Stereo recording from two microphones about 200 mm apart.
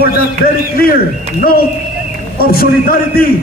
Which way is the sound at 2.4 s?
50° left (ahead or behind).